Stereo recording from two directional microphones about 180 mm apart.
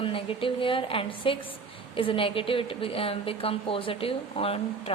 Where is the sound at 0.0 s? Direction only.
30° left (ahead or behind).